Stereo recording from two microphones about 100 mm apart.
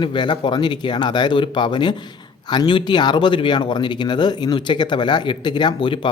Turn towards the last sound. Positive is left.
turn(degrees=50)  # may be behind; listen again after turning